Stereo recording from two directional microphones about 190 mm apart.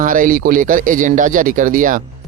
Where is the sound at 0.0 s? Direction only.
45° right (ahead or behind).